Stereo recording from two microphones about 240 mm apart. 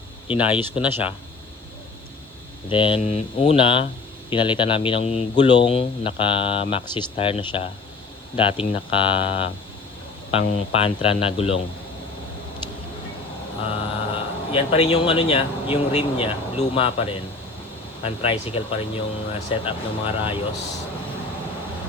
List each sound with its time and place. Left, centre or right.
0.3 s speech: centre
2.6 s speech: left
13.7 s speech: left